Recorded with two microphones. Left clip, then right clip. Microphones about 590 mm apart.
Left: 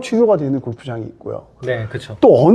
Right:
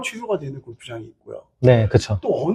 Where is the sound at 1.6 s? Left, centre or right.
Right.